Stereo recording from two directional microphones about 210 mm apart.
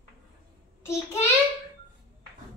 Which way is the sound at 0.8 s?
10° left (ahead or behind).